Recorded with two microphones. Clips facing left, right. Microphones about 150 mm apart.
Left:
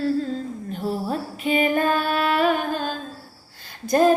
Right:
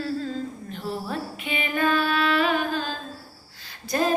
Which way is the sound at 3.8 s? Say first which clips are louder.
Left 7 dB; 50° left (ahead or behind).